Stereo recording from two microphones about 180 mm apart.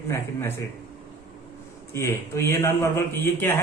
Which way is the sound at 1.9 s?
15° left (ahead or behind).